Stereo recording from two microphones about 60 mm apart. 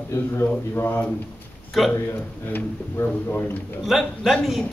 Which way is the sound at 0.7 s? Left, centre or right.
Left.